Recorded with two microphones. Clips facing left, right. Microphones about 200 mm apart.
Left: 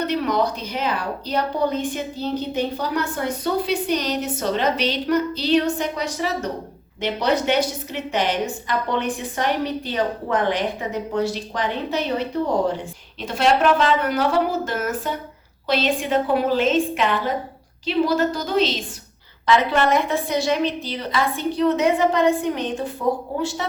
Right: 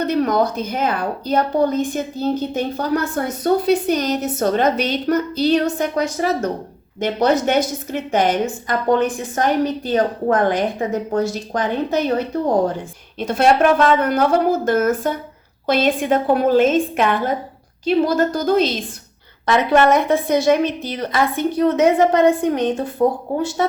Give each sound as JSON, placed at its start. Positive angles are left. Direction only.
{"t": 0.1, "sound": "a woman's voice", "side_deg": -45}
{"t": 13.1, "sound": "a woman's voice", "side_deg": -50}